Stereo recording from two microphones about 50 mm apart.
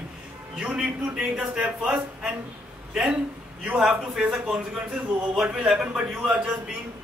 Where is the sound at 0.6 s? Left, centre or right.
Centre.